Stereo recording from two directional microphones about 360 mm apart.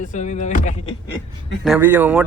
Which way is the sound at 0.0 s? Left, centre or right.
Centre.